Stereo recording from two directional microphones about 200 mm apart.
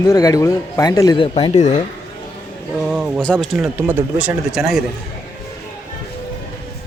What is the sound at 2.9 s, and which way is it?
Speech, 5° right (ahead or behind).